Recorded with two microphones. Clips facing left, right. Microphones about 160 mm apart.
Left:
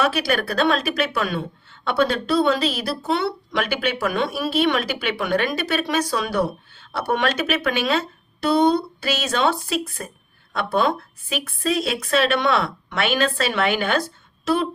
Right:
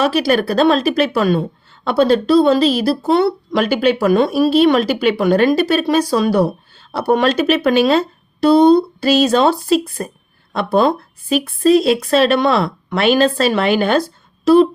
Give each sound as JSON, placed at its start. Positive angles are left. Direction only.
{"t": 0.0, "sound": "a woman's voice", "side_deg": -35}